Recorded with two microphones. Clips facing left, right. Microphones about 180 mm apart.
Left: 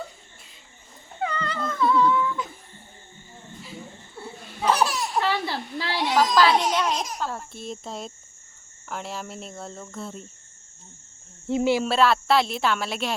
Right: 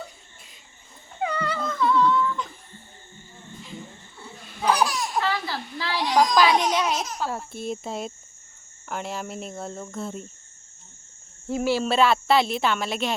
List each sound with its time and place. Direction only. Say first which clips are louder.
1.2 s dog: right 2 dB; 10° right (ahead or behind)
1.6 s humming: left 1 dB; 5° left (ahead or behind)
4.6 s laughter: even; 5° left (ahead or behind)
5.3 s a sound: left 2 dB; 25° left (ahead or behind)
6.3 s speech: even; 10° right (ahead or behind)
11.4 s speech: left 2 dB; 25° left (ahead or behind)
11.9 s speech: even; centre (ahead or behind)